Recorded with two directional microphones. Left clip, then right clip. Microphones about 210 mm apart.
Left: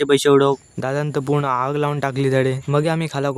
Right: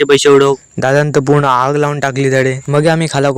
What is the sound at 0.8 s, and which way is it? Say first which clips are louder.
Speech: right 11 dB; 35° right (ahead or behind).